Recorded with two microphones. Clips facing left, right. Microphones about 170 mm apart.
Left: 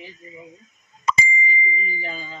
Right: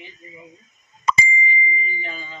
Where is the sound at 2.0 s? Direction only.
35° left (ahead or behind).